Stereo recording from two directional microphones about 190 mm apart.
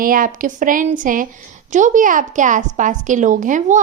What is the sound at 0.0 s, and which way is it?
A woman's voice, 45° right (ahead or behind).